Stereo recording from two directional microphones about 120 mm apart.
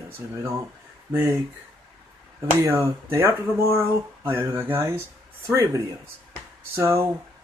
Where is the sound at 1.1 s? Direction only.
20° right (ahead or behind).